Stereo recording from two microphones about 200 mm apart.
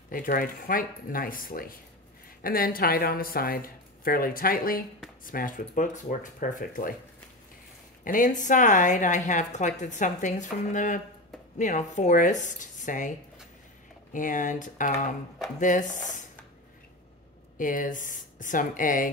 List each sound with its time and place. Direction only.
0.1 s speech: 45° left (ahead or behind)
8.0 s a woman's voice: 40° left (ahead or behind)
14.1 s a woman's voice: 40° left (ahead or behind)
17.6 s a woman's voice: 40° left (ahead or behind)